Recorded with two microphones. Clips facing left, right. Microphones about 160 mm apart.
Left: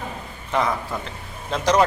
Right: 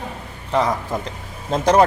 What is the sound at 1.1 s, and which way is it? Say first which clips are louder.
Speech: right 4 dB; 45° right (ahead or behind).